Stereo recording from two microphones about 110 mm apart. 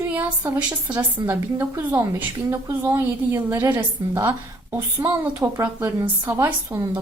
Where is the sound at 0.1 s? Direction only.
15° right (ahead or behind).